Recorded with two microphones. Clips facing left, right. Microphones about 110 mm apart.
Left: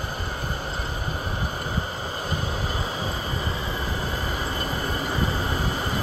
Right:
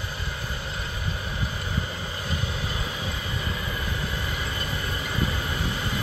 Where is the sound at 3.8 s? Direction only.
35° left (ahead or behind).